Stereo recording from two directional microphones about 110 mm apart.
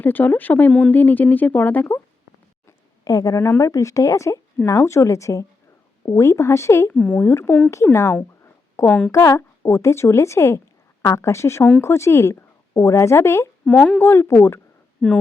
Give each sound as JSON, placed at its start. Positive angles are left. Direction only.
{"t": 0.0, "sound": "speech", "side_deg": 15}
{"t": 2.6, "sound": "a woman's voice", "side_deg": 35}
{"t": 13.7, "sound": "speech", "side_deg": 10}
{"t": 14.1, "sound": "a woman's voice", "side_deg": 25}